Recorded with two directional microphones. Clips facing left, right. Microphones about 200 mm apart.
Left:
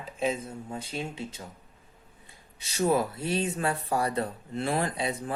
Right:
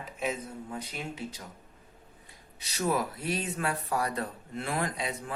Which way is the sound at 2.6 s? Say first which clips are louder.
Left 4 dB; 25° left (ahead or behind).